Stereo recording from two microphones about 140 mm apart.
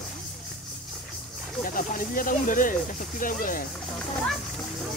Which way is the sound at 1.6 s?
80° left.